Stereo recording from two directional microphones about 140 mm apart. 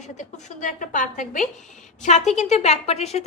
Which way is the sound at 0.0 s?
60° left (ahead or behind).